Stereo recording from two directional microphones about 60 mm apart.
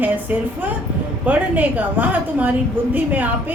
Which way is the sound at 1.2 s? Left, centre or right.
Right.